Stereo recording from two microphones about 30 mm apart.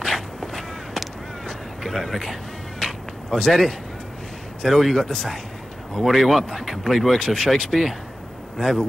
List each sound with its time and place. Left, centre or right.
0.0 s walk: centre
1.8 s a man's voice: centre
3.3 s speech: centre
4.6 s speech: centre
7.2 s speech: centre